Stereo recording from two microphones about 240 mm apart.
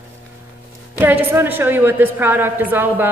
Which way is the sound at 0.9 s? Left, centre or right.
Centre.